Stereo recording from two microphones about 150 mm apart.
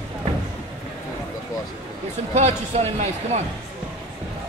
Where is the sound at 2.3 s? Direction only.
50° right (ahead or behind).